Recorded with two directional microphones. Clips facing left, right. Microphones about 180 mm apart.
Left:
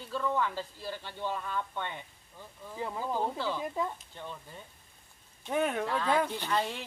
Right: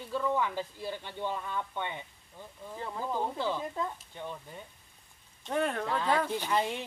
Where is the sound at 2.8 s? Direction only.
5° left (ahead or behind).